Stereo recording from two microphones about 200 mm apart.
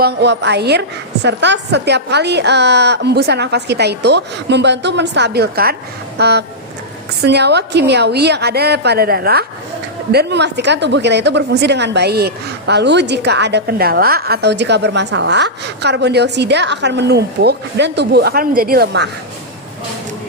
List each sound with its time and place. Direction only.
0.0 s a woman's voice: 55° right (ahead or behind)